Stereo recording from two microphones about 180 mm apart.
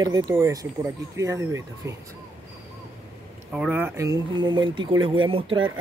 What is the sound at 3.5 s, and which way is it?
Speech, 10° right (ahead or behind).